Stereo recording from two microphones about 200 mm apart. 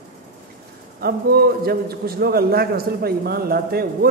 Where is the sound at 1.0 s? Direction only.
50° right (ahead or behind).